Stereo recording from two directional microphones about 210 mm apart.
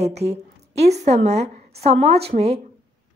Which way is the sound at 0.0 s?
30° right (ahead or behind).